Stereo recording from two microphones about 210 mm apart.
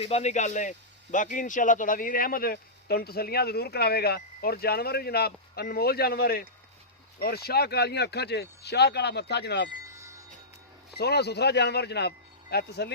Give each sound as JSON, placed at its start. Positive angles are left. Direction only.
{"t": 0.0, "sound": "a man's voice", "side_deg": 30}
{"t": 9.9, "sound": "a sound", "side_deg": -15}
{"t": 10.9, "sound": "a man's voice", "side_deg": 50}